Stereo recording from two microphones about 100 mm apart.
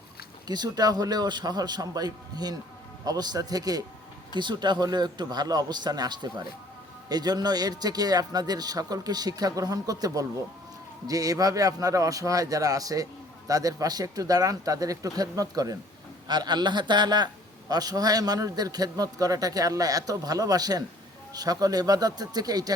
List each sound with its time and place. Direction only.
0.4 s a man's voice: 45° right (ahead or behind)
4.4 s a man's voice: 50° right (ahead or behind)
16.2 s a man's voice: 45° right (ahead or behind)